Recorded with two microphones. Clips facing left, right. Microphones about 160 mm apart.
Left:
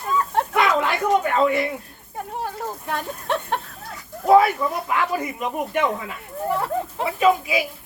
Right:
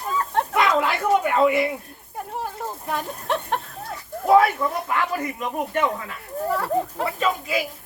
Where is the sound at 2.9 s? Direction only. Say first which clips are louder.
Even; centre (ahead or behind).